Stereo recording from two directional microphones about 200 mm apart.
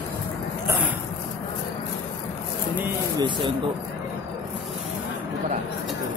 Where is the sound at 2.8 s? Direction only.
20° right (ahead or behind).